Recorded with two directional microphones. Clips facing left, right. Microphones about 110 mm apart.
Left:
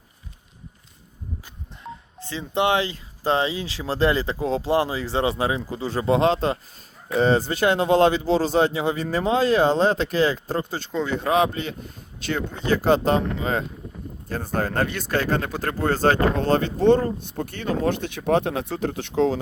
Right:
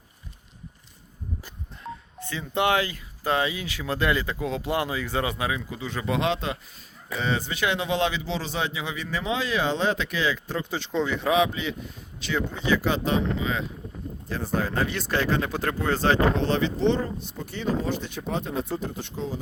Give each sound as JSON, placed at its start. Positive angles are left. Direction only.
{"t": 1.8, "sound": "telephone dialing", "side_deg": 0}
{"t": 2.2, "sound": "speech", "side_deg": 25}
{"t": 14.8, "sound": "speech", "side_deg": 0}
{"t": 15.6, "sound": "speech", "side_deg": 40}